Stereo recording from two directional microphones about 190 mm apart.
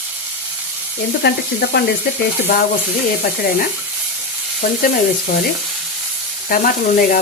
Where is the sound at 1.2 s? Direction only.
60° left (ahead or behind).